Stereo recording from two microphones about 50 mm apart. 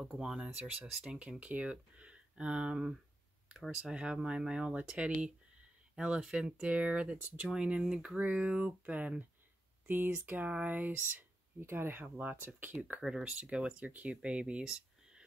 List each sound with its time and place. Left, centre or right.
0.0 s speech: centre
0.4 s speech: right
7.4 s speech: centre
8.2 s speech: right
11.6 s speech: right
13.0 s speech: centre